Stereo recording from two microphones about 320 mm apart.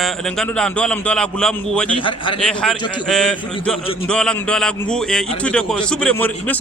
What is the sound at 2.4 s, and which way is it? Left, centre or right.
A man's voice, centre.